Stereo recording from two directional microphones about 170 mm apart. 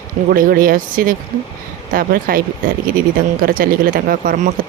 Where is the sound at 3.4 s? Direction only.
55° right (ahead or behind).